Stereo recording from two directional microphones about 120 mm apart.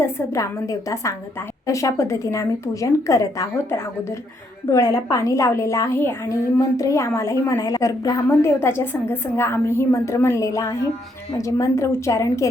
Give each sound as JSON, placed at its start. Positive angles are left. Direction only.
{"t": 0.0, "sound": "a woman's voice", "side_deg": 25}